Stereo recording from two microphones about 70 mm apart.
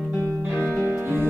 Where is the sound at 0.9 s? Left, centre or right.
Right.